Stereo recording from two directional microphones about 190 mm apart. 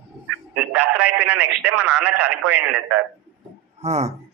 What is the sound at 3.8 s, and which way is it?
Speech, 35° right (ahead or behind).